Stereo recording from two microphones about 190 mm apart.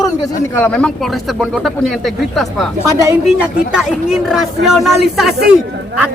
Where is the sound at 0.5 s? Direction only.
5° left (ahead or behind).